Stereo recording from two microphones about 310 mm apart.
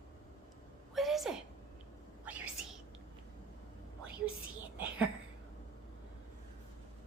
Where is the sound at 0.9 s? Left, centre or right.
Centre.